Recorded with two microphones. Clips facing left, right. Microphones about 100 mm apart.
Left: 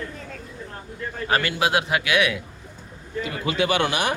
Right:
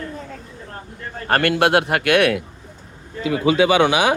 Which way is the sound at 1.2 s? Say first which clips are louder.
Right 6 dB; 55° right (ahead or behind).